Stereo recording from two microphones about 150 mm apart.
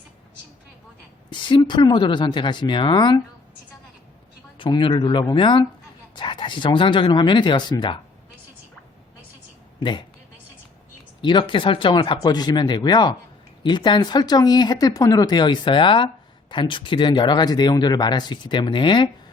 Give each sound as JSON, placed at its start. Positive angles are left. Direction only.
{"t": 1.3, "sound": "speech", "side_deg": 35}
{"t": 4.5, "sound": "speech", "side_deg": 35}
{"t": 11.2, "sound": "speech", "side_deg": 30}